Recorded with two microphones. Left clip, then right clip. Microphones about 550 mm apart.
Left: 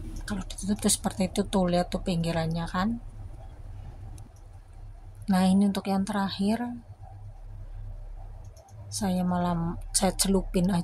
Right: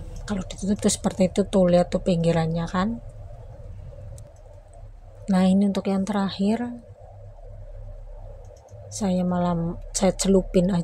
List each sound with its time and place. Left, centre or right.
0.2 s speech: left
5.2 s speech: left
8.8 s a woman's voice: left